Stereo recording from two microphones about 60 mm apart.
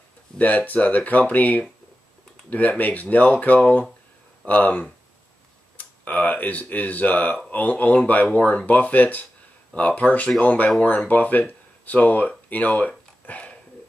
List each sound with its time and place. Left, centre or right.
0.4 s speech: left
2.8 s speech: left